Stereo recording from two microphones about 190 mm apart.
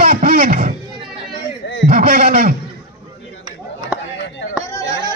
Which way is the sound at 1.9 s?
50° right (ahead or behind).